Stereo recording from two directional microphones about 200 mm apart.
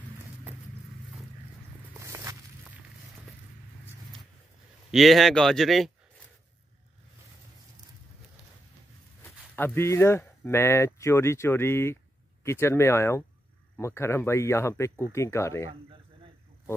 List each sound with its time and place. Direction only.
2.0 s a sound: 15° right (ahead or behind)
4.9 s speech: centre (ahead or behind)
9.2 s speech: 10° left (ahead or behind)